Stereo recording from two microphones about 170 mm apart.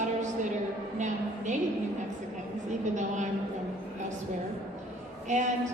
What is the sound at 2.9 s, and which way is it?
Speech, 45° right (ahead or behind).